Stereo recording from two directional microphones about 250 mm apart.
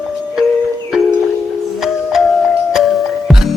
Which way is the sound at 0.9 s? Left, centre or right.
Centre.